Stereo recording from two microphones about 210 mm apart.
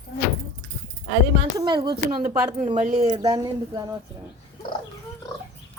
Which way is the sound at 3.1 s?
15° right (ahead or behind).